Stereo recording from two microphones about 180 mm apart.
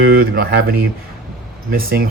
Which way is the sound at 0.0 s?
60° right (ahead or behind).